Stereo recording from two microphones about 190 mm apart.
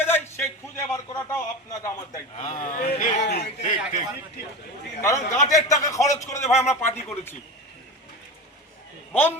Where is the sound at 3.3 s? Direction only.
55° left (ahead or behind).